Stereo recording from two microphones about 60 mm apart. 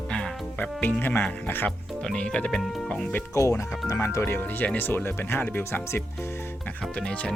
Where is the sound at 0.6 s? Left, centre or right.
Left.